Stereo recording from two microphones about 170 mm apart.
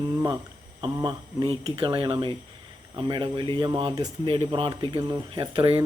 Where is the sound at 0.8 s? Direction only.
25° right (ahead or behind).